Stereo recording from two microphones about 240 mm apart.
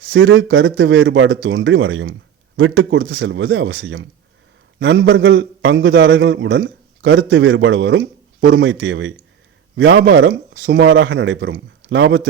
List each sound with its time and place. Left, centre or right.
0.1 s a man's voice: right